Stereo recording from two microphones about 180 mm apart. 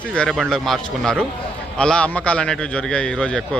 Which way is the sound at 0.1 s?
5° left (ahead or behind).